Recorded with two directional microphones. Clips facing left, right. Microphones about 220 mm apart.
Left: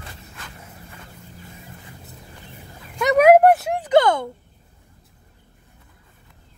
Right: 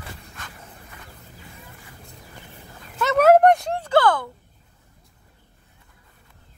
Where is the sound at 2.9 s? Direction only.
15° left (ahead or behind).